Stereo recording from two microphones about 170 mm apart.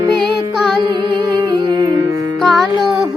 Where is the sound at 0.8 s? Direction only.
25° right (ahead or behind).